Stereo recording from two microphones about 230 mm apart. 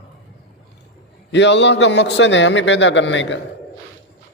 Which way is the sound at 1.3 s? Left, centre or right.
Left.